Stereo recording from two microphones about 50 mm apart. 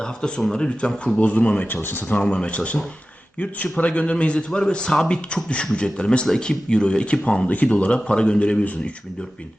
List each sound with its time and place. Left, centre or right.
0.0 s a man's voice: centre
1.8 s speech: left
2.2 s a man's voice: left
6.2 s a man's voice: centre